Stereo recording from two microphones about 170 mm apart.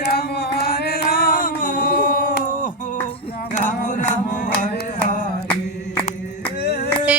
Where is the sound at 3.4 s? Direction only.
50° left (ahead or behind).